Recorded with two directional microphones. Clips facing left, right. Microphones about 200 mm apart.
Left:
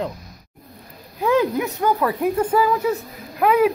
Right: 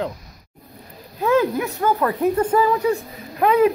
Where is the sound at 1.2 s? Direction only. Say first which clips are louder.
Even; 15° left (ahead or behind).